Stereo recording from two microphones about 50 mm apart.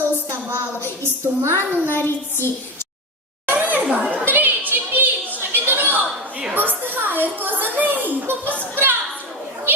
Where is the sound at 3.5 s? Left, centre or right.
Right.